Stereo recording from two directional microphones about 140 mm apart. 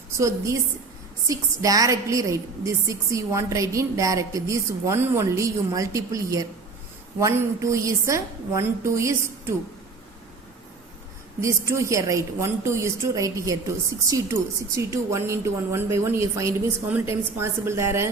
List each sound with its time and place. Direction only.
0.2 s a woman's voice: 20° right (ahead or behind)
11.3 s a woman's voice: 20° right (ahead or behind)